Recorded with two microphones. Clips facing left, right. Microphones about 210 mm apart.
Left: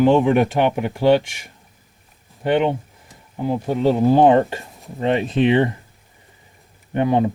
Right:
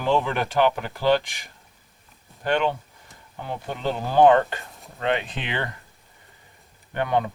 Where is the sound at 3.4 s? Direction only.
35° left (ahead or behind).